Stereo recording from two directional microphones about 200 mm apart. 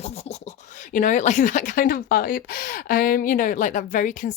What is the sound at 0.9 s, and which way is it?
Speech, 40° left (ahead or behind).